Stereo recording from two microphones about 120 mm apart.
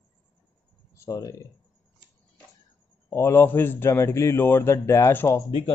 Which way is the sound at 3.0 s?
20° left (ahead or behind).